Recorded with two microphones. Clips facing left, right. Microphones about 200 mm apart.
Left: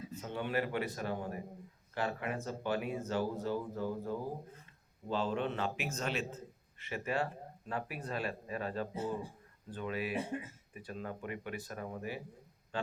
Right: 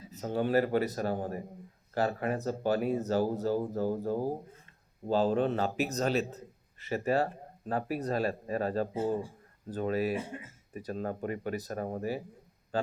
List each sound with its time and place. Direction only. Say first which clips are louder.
0.1 s a man's voice: right 9 dB; 40° right (ahead or behind)